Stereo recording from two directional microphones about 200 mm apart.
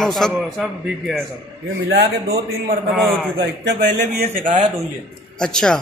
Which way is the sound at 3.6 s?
55° right (ahead or behind).